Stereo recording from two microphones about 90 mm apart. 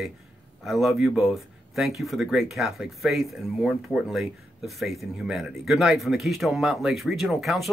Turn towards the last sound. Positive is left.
turn(degrees=0)  # may be behind; listen again after turning